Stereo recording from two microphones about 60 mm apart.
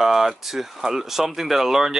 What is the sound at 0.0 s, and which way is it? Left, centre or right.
Speech, centre.